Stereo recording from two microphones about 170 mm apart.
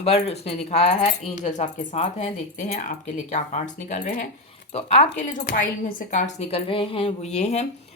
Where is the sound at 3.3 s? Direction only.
45° left (ahead or behind).